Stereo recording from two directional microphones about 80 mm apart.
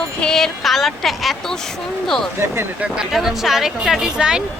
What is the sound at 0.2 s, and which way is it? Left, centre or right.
Speech, centre.